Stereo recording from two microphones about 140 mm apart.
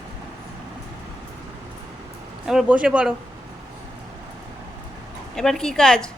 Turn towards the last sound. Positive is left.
turn(degrees=5)  # may be behind; listen again after turning